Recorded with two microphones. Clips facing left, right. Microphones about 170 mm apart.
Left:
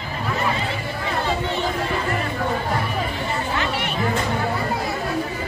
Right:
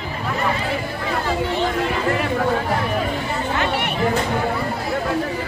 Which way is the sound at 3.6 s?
55° right (ahead or behind).